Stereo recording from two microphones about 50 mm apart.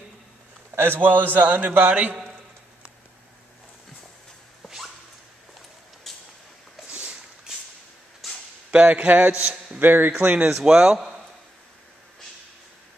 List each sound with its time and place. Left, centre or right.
0.7 s a man's voice: right
6.1 s vehicle: centre
6.9 s a sound: right
8.2 s a sound: centre
8.7 s speech: right
9.8 s a man's voice: right
10.5 s a man's voice: centre